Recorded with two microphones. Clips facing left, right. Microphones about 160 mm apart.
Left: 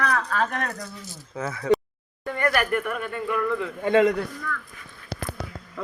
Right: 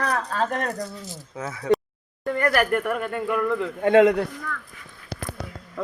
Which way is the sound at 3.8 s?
70° right (ahead or behind).